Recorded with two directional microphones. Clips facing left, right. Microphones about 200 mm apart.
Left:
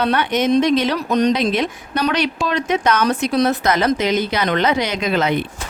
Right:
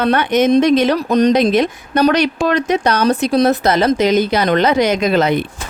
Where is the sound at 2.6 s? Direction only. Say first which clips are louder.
Right 3 dB; 35° right (ahead or behind).